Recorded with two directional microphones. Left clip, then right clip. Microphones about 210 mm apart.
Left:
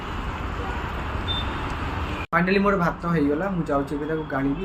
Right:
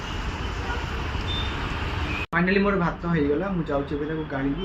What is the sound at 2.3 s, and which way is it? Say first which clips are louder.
Speech: left 2 dB; 10° left (ahead or behind).